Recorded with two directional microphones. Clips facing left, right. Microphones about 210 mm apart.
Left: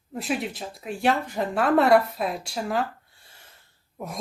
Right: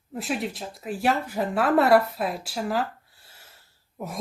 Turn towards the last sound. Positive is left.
turn(degrees=-5)  # may be behind; listen again after turning